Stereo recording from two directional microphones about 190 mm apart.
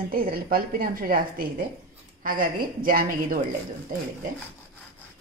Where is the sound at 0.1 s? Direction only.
50° right (ahead or behind).